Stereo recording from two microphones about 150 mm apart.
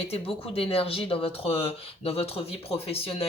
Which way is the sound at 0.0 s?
40° left (ahead or behind).